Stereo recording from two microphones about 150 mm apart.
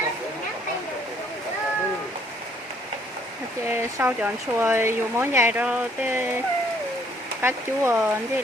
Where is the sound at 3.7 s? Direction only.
15° right (ahead or behind).